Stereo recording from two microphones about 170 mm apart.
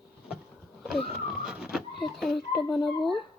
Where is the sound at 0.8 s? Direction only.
Centre (ahead or behind).